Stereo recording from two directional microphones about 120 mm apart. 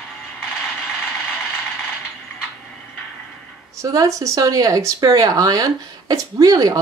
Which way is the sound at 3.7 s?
25° right (ahead or behind).